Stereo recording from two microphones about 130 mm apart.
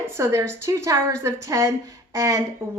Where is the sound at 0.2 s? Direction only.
20° right (ahead or behind).